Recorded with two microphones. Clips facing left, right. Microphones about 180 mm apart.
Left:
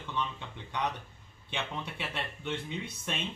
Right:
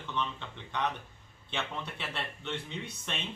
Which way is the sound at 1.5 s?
15° left (ahead or behind).